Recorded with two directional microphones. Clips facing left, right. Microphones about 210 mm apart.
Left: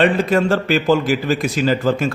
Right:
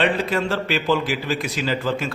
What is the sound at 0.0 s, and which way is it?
A man's voice, 45° left (ahead or behind).